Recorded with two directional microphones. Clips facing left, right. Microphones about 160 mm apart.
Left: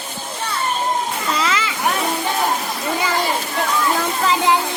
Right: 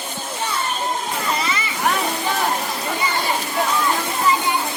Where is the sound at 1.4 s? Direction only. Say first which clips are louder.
Left 4 dB; 90° left.